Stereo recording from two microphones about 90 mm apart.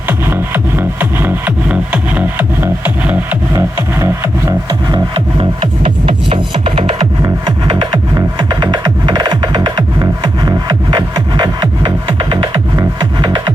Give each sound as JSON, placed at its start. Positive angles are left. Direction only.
{"t": 0.1, "sound": "music", "side_deg": -25}
{"t": 1.7, "sound": "music", "side_deg": -10}
{"t": 3.5, "sound": "music", "side_deg": -35}
{"t": 4.9, "sound": "music", "side_deg": -75}
{"t": 8.4, "sound": "music", "side_deg": -60}
{"t": 12.0, "sound": "music", "side_deg": -70}